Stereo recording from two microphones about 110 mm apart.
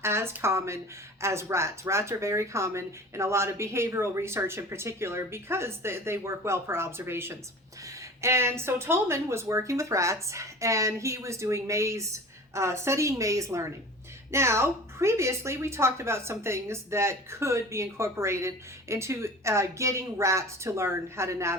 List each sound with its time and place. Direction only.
0.0 s a woman's voice: 25° right (ahead or behind)